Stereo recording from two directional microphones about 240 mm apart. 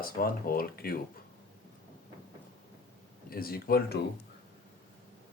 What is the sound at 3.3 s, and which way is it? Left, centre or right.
Speech, left.